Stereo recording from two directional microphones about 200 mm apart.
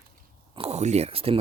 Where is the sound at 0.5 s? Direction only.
30° right (ahead or behind).